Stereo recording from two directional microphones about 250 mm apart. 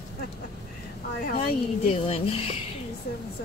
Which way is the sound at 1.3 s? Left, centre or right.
Left.